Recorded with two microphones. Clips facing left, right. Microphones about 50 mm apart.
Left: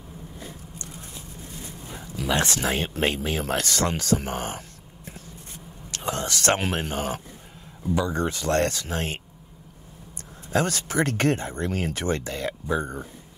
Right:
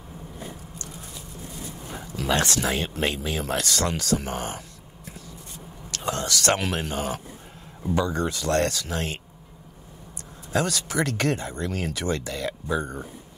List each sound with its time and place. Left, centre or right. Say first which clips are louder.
0.7 s a sound: right 1 dB; left
2.3 s speech: even; left
5.9 s speech: right 1 dB; left
10.5 s speech: left 1 dB; left